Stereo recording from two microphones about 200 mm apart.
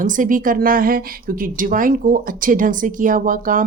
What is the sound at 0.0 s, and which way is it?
Speech, 40° right (ahead or behind).